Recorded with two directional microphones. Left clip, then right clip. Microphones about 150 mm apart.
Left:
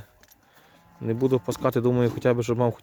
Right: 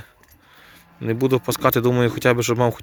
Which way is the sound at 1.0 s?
Centre (ahead or behind).